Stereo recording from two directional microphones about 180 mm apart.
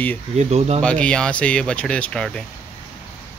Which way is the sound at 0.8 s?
5° left (ahead or behind).